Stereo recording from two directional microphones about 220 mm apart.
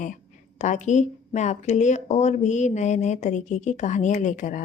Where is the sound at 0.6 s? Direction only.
30° left (ahead or behind).